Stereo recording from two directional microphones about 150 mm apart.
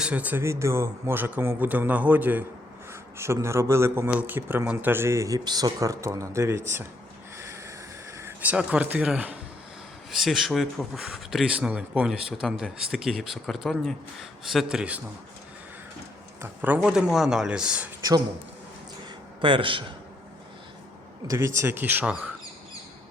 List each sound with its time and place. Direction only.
0.0 s a man's voice: 10° right (ahead or behind)
8.2 s speech: 10° right (ahead or behind)
16.4 s speech: 10° right (ahead or behind)
19.4 s a man's voice: 35° right (ahead or behind)
21.2 s a man's voice: 20° right (ahead or behind)